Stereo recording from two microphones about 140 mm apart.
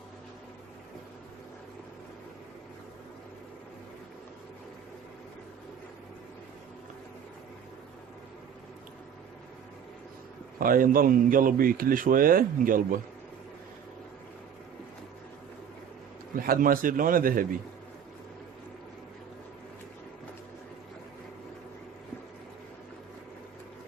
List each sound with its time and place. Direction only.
10.6 s speech: 85° right
16.3 s speech: 85° right